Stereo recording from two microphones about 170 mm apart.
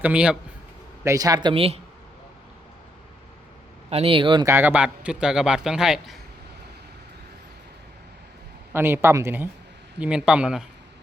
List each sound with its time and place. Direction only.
0.0 s speech: 5° right (ahead or behind)
1.0 s speech: 20° right (ahead or behind)
3.8 s speech: 35° right (ahead or behind)
4.4 s a man's voice: 10° right (ahead or behind)
8.7 s a man's voice: 15° right (ahead or behind)